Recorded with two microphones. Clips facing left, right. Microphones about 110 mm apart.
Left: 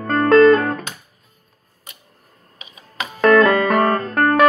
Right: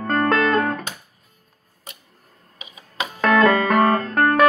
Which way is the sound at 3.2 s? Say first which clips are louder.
Left 3 dB; 10° right (ahead or behind).